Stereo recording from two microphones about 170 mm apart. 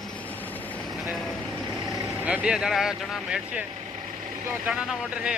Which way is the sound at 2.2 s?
5° right (ahead or behind).